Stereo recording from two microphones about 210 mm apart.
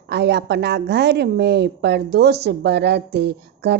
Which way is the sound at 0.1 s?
55° right (ahead or behind).